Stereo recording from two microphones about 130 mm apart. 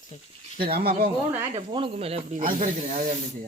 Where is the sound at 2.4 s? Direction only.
90° right.